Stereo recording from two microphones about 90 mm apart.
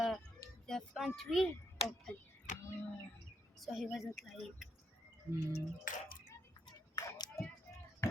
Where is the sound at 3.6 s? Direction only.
Centre (ahead or behind).